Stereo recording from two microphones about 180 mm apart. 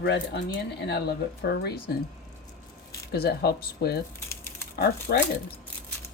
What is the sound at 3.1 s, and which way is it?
Speech, 60° left (ahead or behind).